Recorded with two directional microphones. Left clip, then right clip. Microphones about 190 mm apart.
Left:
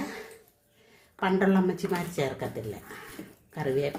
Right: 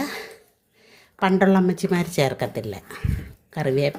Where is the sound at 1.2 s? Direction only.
40° right (ahead or behind).